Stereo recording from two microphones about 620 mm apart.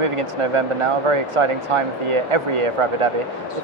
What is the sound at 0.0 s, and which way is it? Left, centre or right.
Speech, right.